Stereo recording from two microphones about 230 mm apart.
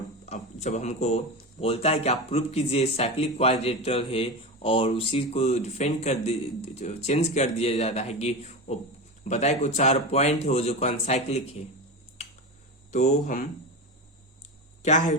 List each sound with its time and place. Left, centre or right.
0.3 s speech: left
12.9 s speech: left
14.8 s speech: left